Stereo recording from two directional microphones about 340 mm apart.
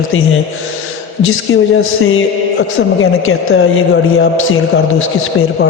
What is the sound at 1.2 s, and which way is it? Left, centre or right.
A man's voice, left.